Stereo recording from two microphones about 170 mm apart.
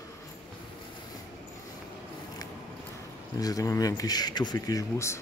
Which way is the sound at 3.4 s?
20° left (ahead or behind).